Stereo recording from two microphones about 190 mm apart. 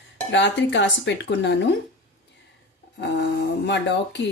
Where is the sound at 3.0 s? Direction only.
65° left (ahead or behind).